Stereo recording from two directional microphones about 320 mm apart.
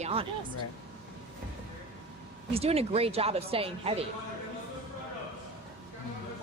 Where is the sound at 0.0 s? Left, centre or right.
Centre.